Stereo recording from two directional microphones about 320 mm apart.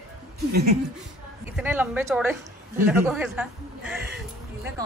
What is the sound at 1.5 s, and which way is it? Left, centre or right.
A woman's voice, centre.